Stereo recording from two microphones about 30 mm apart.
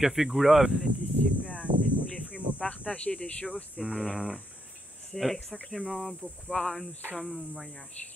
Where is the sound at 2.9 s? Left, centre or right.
Left.